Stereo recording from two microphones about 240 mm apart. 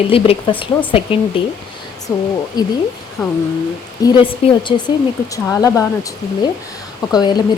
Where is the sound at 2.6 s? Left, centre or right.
Centre.